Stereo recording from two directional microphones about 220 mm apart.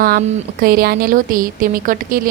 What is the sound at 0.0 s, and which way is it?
A woman's voice, 40° right (ahead or behind).